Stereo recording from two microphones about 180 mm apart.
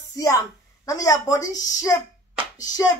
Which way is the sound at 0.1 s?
20° left (ahead or behind).